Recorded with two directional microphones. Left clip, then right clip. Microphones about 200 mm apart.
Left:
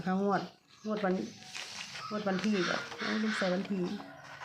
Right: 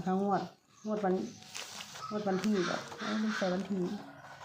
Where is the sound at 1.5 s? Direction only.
55° right (ahead or behind).